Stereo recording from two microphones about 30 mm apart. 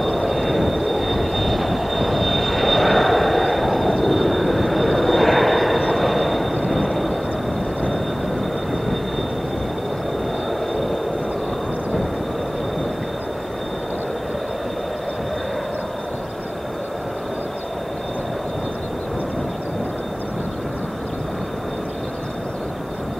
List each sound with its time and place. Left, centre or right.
0.0 s train: centre
10.7 s train: centre